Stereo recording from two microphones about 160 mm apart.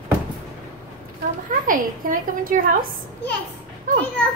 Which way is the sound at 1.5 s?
55° right (ahead or behind).